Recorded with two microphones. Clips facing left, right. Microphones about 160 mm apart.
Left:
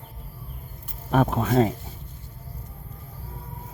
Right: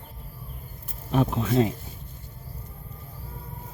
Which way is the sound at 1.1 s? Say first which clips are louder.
Left 2 dB; 50° left (ahead or behind).